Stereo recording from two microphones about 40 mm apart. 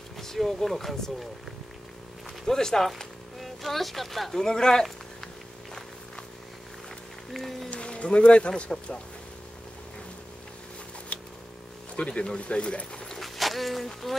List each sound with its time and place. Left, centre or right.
0.2 s speech: centre
2.4 s speech: centre
3.3 s speech: centre
7.3 s speech: centre
7.7 s speech: left
11.1 s a sound: left
12.0 s speech: left
13.1 s speech: centre